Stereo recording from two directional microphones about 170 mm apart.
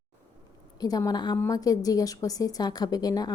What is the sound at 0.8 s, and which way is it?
A woman's voice, 20° left (ahead or behind).